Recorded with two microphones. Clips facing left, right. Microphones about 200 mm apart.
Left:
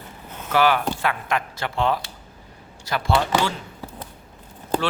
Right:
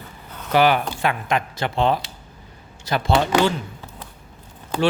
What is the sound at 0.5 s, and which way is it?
Speech, 20° right (ahead or behind).